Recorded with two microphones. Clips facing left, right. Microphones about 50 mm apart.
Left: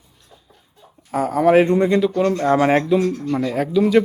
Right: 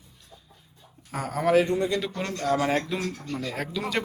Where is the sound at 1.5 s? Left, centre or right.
Left.